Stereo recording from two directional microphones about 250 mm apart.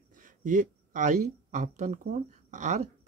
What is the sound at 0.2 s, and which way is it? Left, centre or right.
Speech, right.